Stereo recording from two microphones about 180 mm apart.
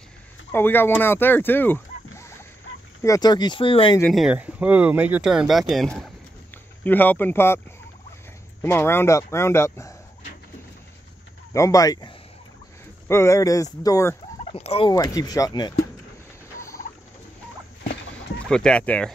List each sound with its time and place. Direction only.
0.5 s speech: 10° left (ahead or behind); by 4.0 s 30° left (ahead or behind)
4.1 s speech: 5° right (ahead or behind); by 7.6 s 15° left (ahead or behind)
8.6 s speech: 15° left (ahead or behind)
11.5 s speech: 20° left (ahead or behind)
13.1 s speech: 15° left (ahead or behind)
14.4 s fowl: 35° left (ahead or behind)
14.9 s speech: 20° left (ahead or behind)
18.5 s speech: 5° left (ahead or behind)